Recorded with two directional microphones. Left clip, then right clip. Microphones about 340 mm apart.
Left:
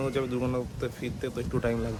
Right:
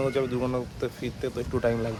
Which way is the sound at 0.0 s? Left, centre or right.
Centre.